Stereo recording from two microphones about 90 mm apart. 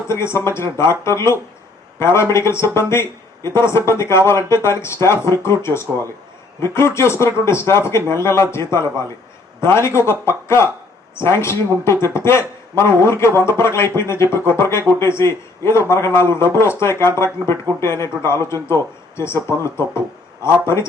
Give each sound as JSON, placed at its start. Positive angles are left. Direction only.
{"t": 0.1, "sound": "a man's voice", "side_deg": 30}